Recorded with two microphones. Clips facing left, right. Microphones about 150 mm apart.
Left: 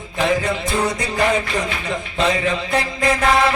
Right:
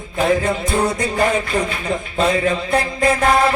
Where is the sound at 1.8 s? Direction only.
45° right (ahead or behind).